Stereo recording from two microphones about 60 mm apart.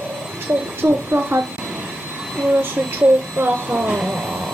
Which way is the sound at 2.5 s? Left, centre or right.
Right.